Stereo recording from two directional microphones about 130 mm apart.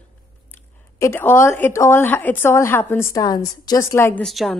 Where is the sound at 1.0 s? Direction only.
20° left (ahead or behind).